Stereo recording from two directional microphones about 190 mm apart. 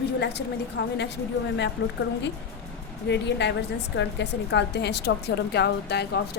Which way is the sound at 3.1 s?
65° left (ahead or behind).